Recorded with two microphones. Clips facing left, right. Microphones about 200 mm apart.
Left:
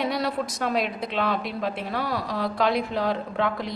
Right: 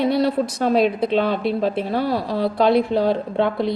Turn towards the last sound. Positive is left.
turn(degrees=-30)  # may be behind; listen again after turning